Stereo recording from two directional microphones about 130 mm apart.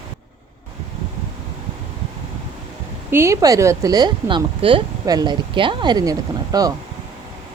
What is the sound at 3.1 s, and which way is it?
Speech, 20° right (ahead or behind).